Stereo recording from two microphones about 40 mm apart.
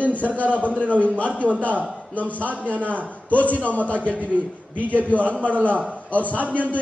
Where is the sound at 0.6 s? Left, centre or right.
Right.